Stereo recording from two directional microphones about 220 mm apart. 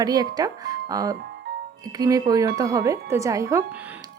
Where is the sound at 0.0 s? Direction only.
15° right (ahead or behind).